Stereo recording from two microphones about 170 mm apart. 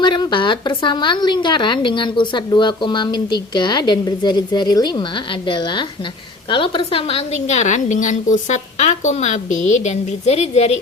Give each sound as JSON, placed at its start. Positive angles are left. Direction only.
{"t": 0.0, "sound": "a woman's voice", "side_deg": 25}